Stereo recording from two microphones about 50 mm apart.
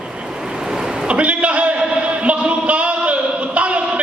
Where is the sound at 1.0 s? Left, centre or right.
Right.